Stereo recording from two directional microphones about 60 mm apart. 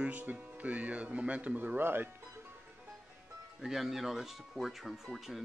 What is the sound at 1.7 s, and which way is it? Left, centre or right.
Speech, right.